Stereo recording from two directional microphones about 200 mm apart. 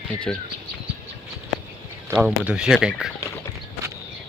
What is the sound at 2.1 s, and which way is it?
Speech, 10° right (ahead or behind).